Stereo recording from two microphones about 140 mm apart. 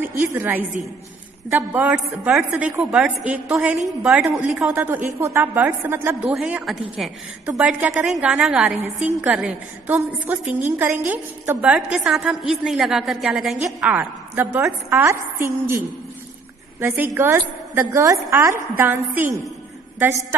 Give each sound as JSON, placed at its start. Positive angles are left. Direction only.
{"t": 0.0, "sound": "a woman's voice", "side_deg": -20}
{"t": 16.8, "sound": "a woman's voice", "side_deg": -15}